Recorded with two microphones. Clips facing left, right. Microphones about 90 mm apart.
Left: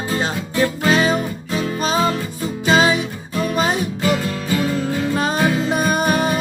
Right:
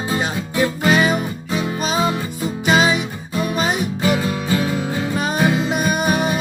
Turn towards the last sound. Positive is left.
turn(degrees=-5)  # may be behind; listen again after turning